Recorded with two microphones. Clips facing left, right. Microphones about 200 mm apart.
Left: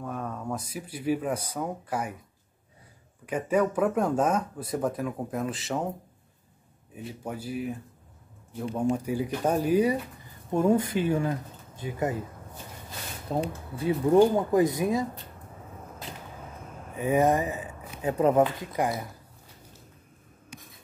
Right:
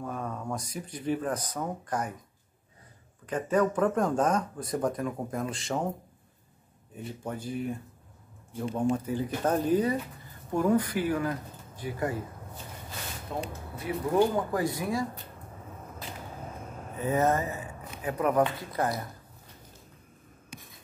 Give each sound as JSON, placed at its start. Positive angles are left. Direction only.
{"t": 0.0, "sound": "speech", "side_deg": 0}
{"t": 3.3, "sound": "speech", "side_deg": 10}
{"t": 7.2, "sound": "speech", "side_deg": 5}
{"t": 10.5, "sound": "speech", "side_deg": 25}
{"t": 13.3, "sound": "speech", "side_deg": 30}
{"t": 16.9, "sound": "speech", "side_deg": 15}
{"t": 18.8, "sound": "speech", "side_deg": 15}